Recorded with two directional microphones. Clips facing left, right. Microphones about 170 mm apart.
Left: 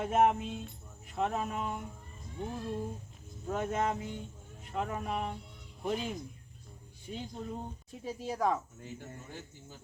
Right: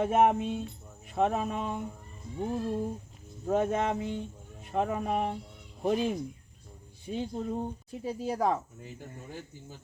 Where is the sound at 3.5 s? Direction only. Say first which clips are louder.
Right 5 dB; 30° right (ahead or behind).